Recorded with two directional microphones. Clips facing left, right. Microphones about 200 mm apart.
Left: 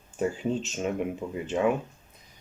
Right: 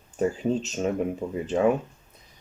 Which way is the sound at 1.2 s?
45° right (ahead or behind).